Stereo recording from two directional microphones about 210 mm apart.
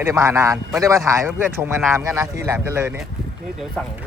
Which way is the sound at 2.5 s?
10° right (ahead or behind).